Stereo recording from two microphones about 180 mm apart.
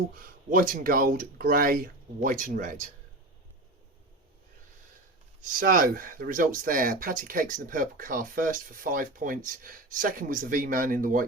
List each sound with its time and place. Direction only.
0.2 s speech: 50° right (ahead or behind)
5.4 s speech: 50° right (ahead or behind)